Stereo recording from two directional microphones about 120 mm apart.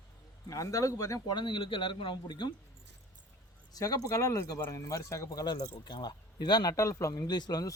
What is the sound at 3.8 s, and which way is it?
Speech, 30° left (ahead or behind).